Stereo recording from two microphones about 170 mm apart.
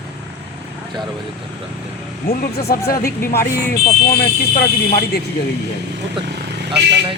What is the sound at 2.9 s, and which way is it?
Speech, 60° left (ahead or behind).